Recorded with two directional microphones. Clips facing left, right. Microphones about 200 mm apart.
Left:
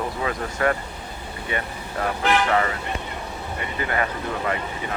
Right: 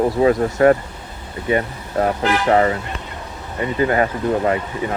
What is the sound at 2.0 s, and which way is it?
Speech, 40° right (ahead or behind).